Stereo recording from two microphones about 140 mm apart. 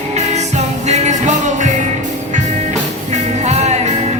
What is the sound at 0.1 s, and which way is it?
Music, 55° right (ahead or behind).